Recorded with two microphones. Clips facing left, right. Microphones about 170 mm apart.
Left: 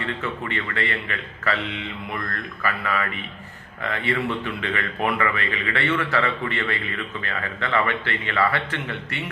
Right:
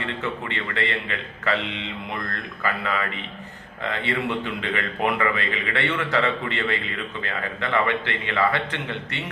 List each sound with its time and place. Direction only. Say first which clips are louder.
0.0 s a man's voice: even; 20° right (ahead or behind)